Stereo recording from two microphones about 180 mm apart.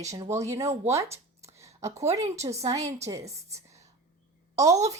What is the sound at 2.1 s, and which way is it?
Speech, 15° right (ahead or behind).